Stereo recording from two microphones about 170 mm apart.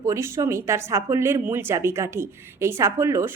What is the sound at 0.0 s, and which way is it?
A woman's voice, 15° right (ahead or behind).